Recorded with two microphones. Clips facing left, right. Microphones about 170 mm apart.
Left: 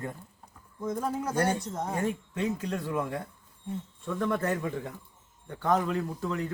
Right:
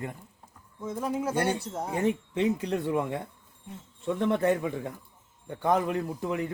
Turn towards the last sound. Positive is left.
turn(degrees=-15)  # may be behind; listen again after turning